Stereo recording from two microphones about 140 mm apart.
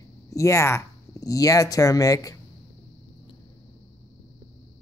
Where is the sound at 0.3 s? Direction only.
20° left (ahead or behind).